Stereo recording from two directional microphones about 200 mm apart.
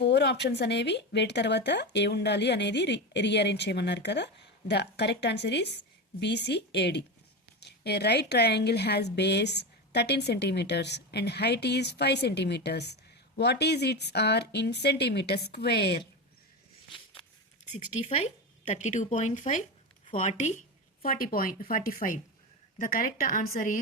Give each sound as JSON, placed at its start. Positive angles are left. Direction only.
{"t": 0.0, "sound": "a woman's voice", "side_deg": 60}
{"t": 17.7, "sound": "speech", "side_deg": 30}